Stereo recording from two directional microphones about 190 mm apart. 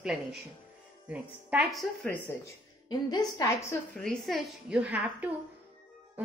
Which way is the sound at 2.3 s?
10° left (ahead or behind).